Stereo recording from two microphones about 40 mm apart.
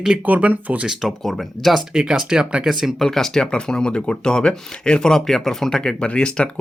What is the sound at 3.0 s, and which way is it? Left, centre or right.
Speech, centre.